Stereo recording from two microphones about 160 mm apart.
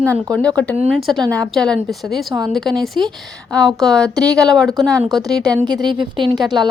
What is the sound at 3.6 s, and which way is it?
Speech, 20° right (ahead or behind).